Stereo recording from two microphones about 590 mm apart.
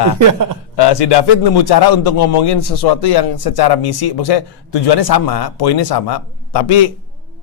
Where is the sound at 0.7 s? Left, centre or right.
Left.